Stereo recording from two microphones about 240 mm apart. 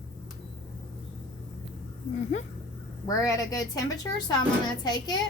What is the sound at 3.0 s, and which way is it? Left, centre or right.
A woman's voice, centre.